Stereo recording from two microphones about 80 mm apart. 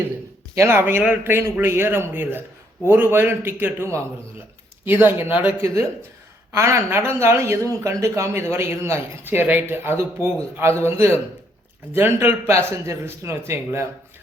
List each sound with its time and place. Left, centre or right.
0.5 s speech: right
5.6 s speech: right